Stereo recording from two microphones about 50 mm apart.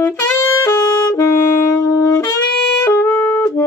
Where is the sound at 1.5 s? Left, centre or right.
Left.